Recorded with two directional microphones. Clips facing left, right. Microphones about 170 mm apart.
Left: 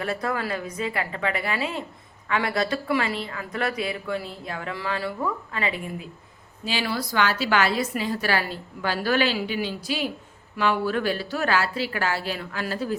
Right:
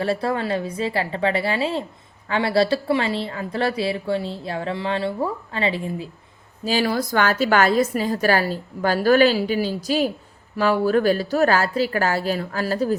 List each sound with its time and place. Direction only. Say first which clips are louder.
0.0 s a woman's voice: right 5 dB; 30° right (ahead or behind)
6.7 s a woman's voice: right 6 dB; 40° right (ahead or behind)